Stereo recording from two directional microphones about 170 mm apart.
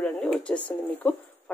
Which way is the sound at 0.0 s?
5° left (ahead or behind).